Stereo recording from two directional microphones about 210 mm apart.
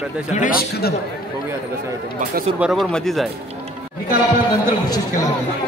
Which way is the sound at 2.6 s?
Centre (ahead or behind).